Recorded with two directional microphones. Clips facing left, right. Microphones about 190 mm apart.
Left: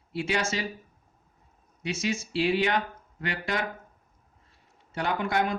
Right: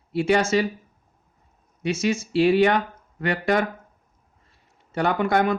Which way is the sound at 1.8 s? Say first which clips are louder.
Right 7 dB; 55° right (ahead or behind).